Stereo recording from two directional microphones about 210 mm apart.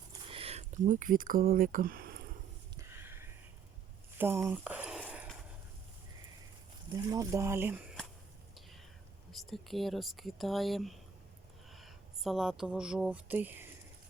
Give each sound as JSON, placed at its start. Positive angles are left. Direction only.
{"t": 0.3, "sound": "speech", "side_deg": -25}
{"t": 2.7, "sound": "a sound", "side_deg": -10}
{"t": 6.9, "sound": "speech", "side_deg": -15}
{"t": 9.3, "sound": "speech", "side_deg": 0}